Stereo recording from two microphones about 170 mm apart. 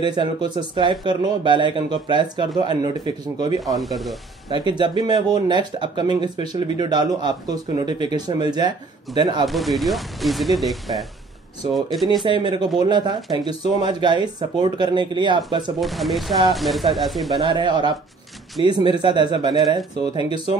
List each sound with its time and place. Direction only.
0.0 s speech: 25° right (ahead or behind)
3.6 s speech: centre (ahead or behind)
4.5 s speech: 25° right (ahead or behind)
9.5 s speech: centre (ahead or behind)
12.3 s speech: 25° right (ahead or behind)
15.8 s speech: centre (ahead or behind)
17.5 s speech: 25° right (ahead or behind)